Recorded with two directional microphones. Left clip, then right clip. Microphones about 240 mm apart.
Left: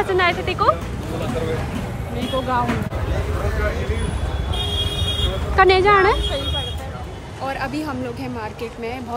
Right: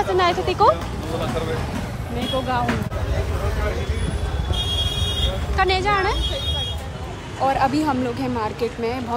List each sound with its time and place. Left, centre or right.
0.1 s speech: centre
2.1 s speech: centre
5.6 s speech: centre
7.4 s speech: centre